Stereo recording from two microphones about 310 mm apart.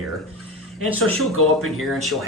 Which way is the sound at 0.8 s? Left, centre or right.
Right.